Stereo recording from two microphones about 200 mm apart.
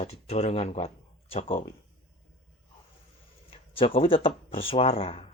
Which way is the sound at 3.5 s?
30° left (ahead or behind).